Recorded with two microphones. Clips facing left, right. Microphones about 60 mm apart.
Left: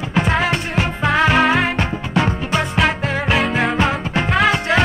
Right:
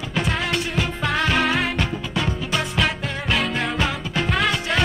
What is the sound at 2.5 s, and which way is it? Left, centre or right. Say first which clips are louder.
Music: left 5 dB; centre.